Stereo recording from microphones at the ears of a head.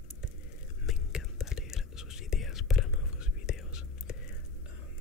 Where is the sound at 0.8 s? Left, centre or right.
Left.